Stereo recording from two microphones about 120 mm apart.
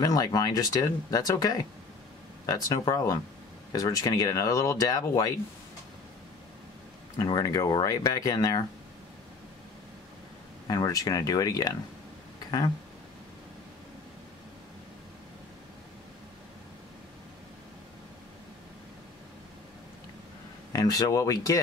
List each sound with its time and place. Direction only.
0.0 s speech: 30° left (ahead or behind)
7.2 s speech: 30° left (ahead or behind)
10.7 s speech: 30° left (ahead or behind)
12.4 s a sound: 35° left (ahead or behind)
20.7 s speech: 30° left (ahead or behind)